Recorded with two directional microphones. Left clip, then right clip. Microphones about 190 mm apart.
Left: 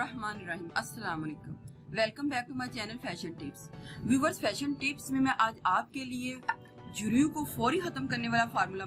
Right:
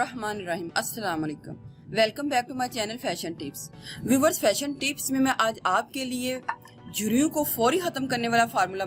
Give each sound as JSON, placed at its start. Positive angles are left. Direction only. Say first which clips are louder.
{"t": 0.0, "sound": "music", "louder": "right 7 dB", "side_deg": -45}
{"t": 0.4, "sound": "speech", "louder": "right 8 dB", "side_deg": -45}